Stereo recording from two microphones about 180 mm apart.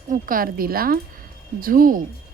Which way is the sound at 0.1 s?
50° right (ahead or behind).